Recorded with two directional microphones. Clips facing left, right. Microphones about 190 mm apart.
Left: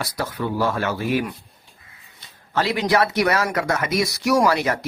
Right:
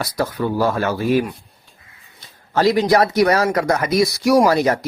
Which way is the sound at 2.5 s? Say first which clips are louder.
Right 5 dB; 40° right (ahead or behind).